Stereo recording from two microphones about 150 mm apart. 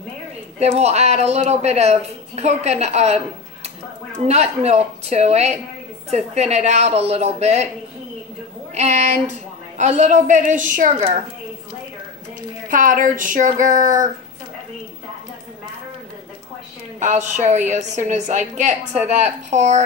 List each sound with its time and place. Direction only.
0.6 s speech: 45° right (ahead or behind)
4.3 s speech: 45° right (ahead or behind)
8.7 s speech: 45° right (ahead or behind)
12.6 s speech: 60° right (ahead or behind)
17.0 s speech: 50° right (ahead or behind)